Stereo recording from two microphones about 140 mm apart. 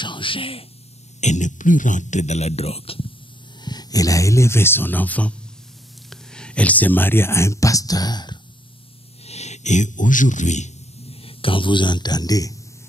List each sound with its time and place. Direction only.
0.0 s speech: 35° left (ahead or behind)
1.2 s speech: 60° left (ahead or behind); by 3.1 s 45° left (ahead or behind)
3.6 s speech: 30° left (ahead or behind)
9.2 s a man's voice: 50° left (ahead or behind); by 12.5 s 25° left (ahead or behind)